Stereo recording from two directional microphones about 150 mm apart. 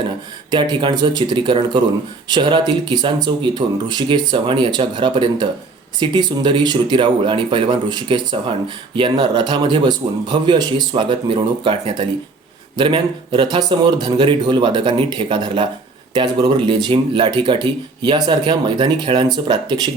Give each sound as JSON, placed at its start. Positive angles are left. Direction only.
{"t": 0.5, "sound": "speech", "side_deg": -30}